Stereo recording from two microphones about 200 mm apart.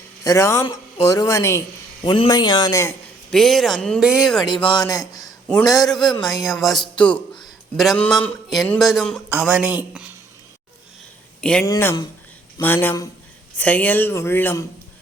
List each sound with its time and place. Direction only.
0.3 s a man's voice: 15° left (ahead or behind)
3.2 s speech: centre (ahead or behind)
4.4 s a man's voice: 25° left (ahead or behind)
5.2 s a sound: 5° left (ahead or behind)
5.8 s a man's voice: centre (ahead or behind)
11.3 s speech: 5° left (ahead or behind)